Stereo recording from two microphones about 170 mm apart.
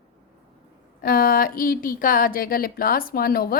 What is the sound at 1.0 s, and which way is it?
Speech, 60° left (ahead or behind).